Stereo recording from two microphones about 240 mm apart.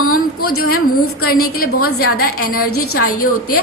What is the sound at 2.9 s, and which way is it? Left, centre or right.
Speech, left.